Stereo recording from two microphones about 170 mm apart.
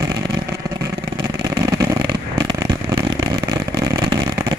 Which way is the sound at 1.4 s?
20° right (ahead or behind).